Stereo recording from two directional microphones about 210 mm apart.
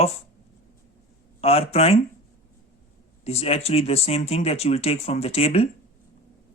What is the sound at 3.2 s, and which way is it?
Speech, 30° left (ahead or behind).